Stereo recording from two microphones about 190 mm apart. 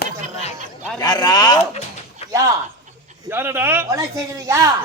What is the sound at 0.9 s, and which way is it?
Speech, 20° left (ahead or behind).